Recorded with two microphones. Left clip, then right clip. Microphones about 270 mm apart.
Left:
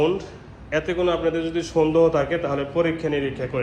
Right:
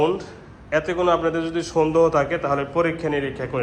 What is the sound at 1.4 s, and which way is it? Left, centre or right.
Speech, right.